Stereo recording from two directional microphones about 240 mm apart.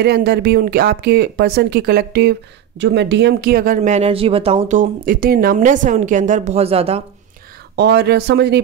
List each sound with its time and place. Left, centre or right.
0.0 s speech: right
7.7 s speech: right